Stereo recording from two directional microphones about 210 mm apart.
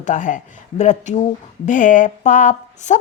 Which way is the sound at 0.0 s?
35° left (ahead or behind).